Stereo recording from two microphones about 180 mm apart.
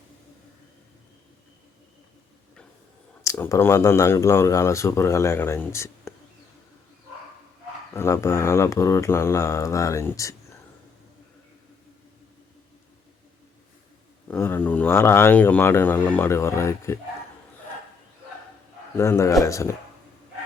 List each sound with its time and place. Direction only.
3.2 s speech: 15° left (ahead or behind)
7.9 s speech: 15° left (ahead or behind)
14.3 s speech: 10° left (ahead or behind)
18.9 s speech: 15° left (ahead or behind)